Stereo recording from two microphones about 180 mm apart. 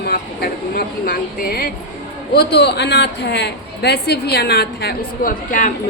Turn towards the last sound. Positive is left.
turn(degrees=50)  # may be behind; listen again after turning